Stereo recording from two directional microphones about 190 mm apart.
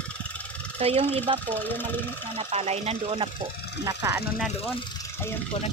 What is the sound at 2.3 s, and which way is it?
Speech, 30° right (ahead or behind).